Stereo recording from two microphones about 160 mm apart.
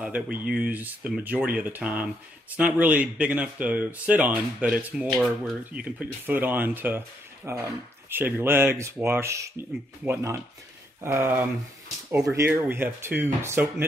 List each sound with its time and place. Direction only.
0.0 s speech: 5° right (ahead or behind)
5.0 s speech: 5° left (ahead or behind)
5.7 s speech: 10° right (ahead or behind)